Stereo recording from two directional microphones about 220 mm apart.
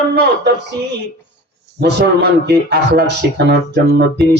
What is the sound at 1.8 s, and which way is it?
Speech, 45° right (ahead or behind).